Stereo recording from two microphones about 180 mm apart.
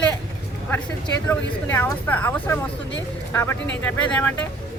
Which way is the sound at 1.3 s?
15° left (ahead or behind).